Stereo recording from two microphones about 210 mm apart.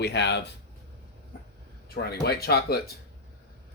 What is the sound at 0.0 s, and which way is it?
Speech, 55° left (ahead or behind).